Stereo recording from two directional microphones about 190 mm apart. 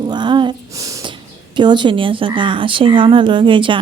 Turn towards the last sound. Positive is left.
turn(degrees=-25)  # may be behind; listen again after turning